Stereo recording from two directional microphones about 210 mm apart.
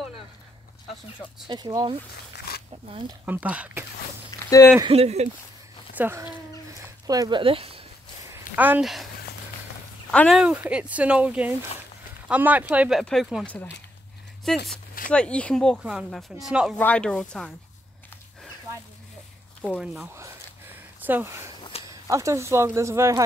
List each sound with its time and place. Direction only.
1.5 s speech: 20° right (ahead or behind)
2.3 s a sound: 50° left (ahead or behind)
3.3 s speech: 5° right (ahead or behind)
4.7 s speech: 25° right (ahead or behind)
5.9 s speech: 10° right (ahead or behind)
8.5 s speech: 10° right (ahead or behind)
10.1 s speech: centre (ahead or behind)
19.8 s speech: centre (ahead or behind)
20.2 s a sound: 10° right (ahead or behind)
21.8 s speech: 15° right (ahead or behind)